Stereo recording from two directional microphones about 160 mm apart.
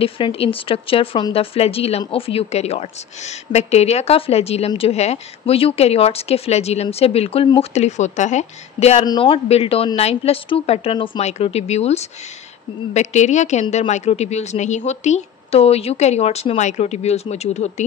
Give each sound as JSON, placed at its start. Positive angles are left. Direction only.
{"t": 0.0, "sound": "a woman's voice", "side_deg": 35}
{"t": 9.0, "sound": "a woman's voice", "side_deg": 30}